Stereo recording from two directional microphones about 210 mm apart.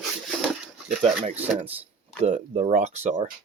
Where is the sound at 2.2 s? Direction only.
30° right (ahead or behind).